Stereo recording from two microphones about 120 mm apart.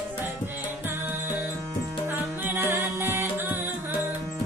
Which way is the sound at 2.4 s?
15° right (ahead or behind).